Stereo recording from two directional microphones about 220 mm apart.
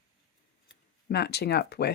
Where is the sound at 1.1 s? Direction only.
50° left (ahead or behind).